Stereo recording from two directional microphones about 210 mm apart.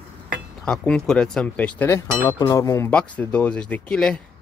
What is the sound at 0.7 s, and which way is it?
Speech, 5° left (ahead or behind).